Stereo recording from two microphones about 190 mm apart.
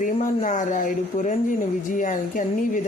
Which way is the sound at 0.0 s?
40° left (ahead or behind).